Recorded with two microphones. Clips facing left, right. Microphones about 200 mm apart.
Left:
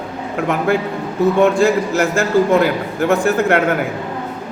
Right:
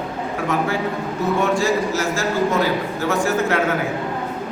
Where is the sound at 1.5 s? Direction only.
55° left (ahead or behind).